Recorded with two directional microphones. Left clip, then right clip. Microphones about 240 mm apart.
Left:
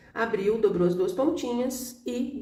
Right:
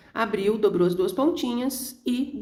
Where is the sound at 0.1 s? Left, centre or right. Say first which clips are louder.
Right 1 dB; right.